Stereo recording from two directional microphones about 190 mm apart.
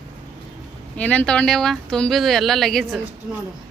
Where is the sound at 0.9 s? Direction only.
10° left (ahead or behind).